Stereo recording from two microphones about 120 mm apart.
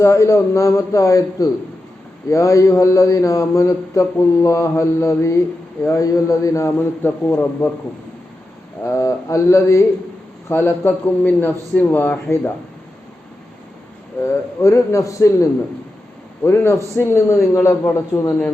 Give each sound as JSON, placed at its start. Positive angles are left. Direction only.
{"t": 0.0, "sound": "a man's voice", "side_deg": 25}
{"t": 8.8, "sound": "a man's voice", "side_deg": 25}
{"t": 14.2, "sound": "a man's voice", "side_deg": 25}